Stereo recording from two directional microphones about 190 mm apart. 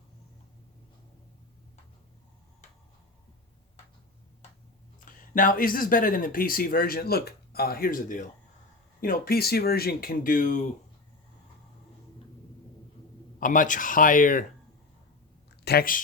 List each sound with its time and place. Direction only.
5.0 s speech: 45° left (ahead or behind)
13.4 s speech: 45° left (ahead or behind)
15.4 s a sound: 60° left (ahead or behind)